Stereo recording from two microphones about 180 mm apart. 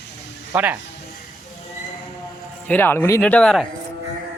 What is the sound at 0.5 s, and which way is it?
Speech, 10° right (ahead or behind).